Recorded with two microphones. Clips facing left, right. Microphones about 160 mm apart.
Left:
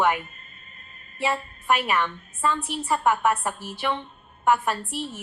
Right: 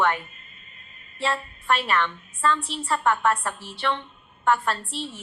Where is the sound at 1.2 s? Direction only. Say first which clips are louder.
Left 1 dB; 15° left (ahead or behind).